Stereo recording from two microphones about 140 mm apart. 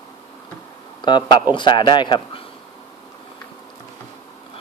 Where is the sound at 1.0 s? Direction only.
35° left (ahead or behind).